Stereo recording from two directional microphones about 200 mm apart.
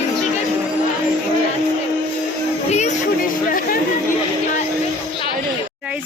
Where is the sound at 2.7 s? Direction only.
35° left (ahead or behind).